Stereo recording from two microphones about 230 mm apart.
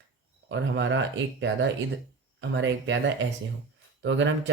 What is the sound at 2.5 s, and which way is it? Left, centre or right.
Speech, right.